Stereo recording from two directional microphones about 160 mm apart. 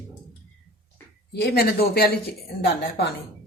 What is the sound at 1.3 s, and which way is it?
Speech, 90° left.